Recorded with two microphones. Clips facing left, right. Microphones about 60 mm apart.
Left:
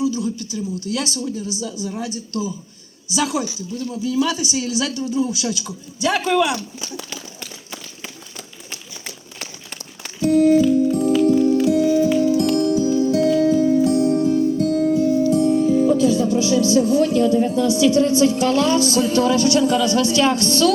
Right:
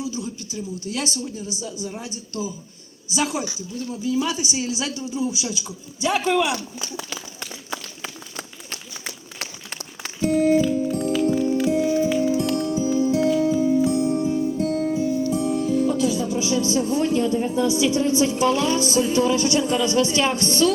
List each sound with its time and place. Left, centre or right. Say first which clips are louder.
0.0 s a woman's voice: left 8 dB; right
10.2 s music: left 4 dB; right
11.6 s music: left 4 dB; right
12.0 s music: left 4 dB; centre
14.6 s music: left 4 dB; right
14.8 s music: left 6 dB; centre
16.4 s a woman's voice: left 5 dB; right